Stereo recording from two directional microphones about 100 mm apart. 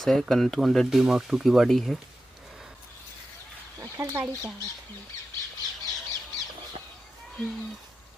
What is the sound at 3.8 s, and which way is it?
Chicken, 40° right (ahead or behind).